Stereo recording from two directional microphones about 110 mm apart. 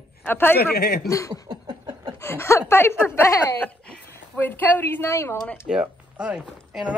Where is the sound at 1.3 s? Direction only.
40° right (ahead or behind).